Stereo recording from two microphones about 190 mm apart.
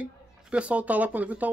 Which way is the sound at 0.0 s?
5° right (ahead or behind).